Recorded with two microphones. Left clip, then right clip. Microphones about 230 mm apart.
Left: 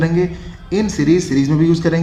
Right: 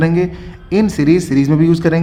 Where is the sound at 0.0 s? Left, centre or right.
Right.